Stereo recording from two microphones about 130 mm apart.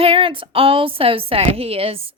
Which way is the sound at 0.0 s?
45° right (ahead or behind).